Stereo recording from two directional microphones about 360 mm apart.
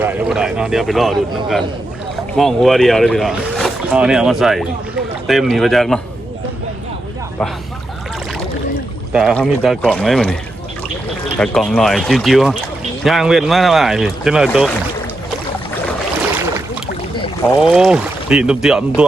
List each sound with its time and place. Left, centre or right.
0.0 s speech: centre
9.1 s speech: centre
11.3 s speech: centre
17.6 s speech: centre